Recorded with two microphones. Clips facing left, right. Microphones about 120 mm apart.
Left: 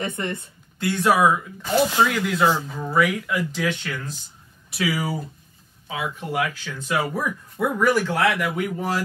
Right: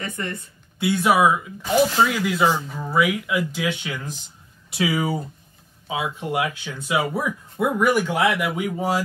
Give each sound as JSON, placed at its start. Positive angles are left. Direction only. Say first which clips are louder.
{"t": 0.0, "sound": "speech", "louder": "left 2 dB", "side_deg": 20}
{"t": 0.7, "sound": "speech", "louder": "right 1 dB", "side_deg": -10}